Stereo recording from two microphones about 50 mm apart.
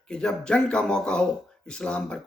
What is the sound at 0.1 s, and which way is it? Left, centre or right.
Speech, centre.